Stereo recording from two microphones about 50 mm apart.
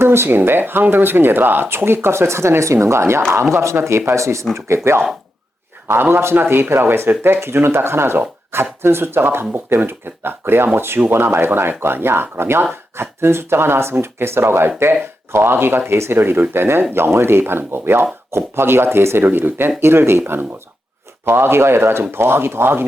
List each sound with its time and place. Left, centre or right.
0.0 s a sound: right
0.3 s speech: right
3.8 s speech: right
4.5 s speech: right